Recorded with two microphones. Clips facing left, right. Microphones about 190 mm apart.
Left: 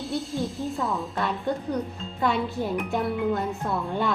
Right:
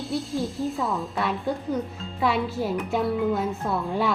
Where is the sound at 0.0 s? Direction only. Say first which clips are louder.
Right 1 dB; centre (ahead or behind).